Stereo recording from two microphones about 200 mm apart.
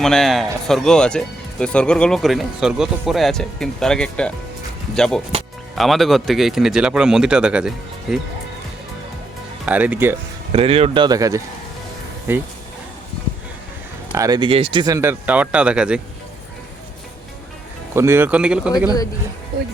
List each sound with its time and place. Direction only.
0.0 s speech: centre (ahead or behind)
9.6 s speech: 10° right (ahead or behind)
10.5 s speech: 30° right (ahead or behind); by 12.4 s 10° right (ahead or behind)
14.1 s speech: 15° right (ahead or behind)
17.9 s speech: 10° right (ahead or behind)